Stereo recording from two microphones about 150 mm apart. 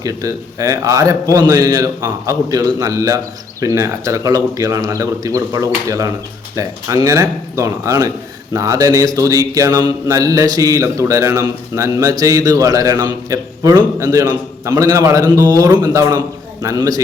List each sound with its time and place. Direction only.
0.0 s mantra: 25° right (ahead or behind)